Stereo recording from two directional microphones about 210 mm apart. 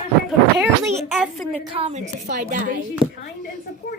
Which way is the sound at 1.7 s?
30° right (ahead or behind).